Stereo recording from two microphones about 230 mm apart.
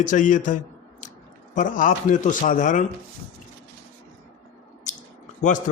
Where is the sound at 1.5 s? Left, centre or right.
Left.